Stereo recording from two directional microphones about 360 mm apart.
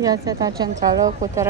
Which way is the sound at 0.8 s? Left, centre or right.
Right.